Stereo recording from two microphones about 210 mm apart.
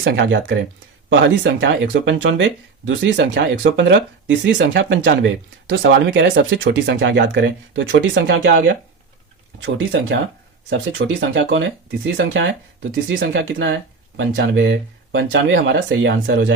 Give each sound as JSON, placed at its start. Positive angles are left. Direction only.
{"t": 0.0, "sound": "speech", "side_deg": -55}